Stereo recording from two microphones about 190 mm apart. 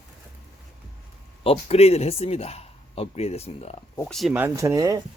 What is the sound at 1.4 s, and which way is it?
Speech, 30° left (ahead or behind).